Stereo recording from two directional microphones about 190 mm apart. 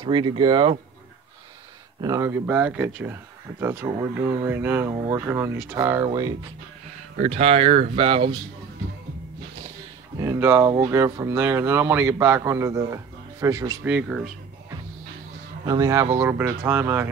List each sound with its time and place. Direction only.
0.0 s speech: 25° right (ahead or behind)
2.0 s speech: 20° right (ahead or behind)
7.2 s speech: 35° right (ahead or behind)
10.1 s speech: 15° right (ahead or behind)
13.8 s speech: 5° right (ahead or behind)
15.6 s speech: 20° right (ahead or behind)